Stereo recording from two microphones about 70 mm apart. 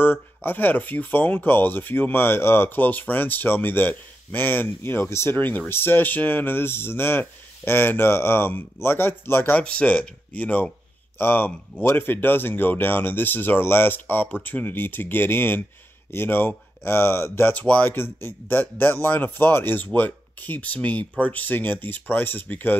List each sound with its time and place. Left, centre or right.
0.0 s speech: left
17.6 s speech: left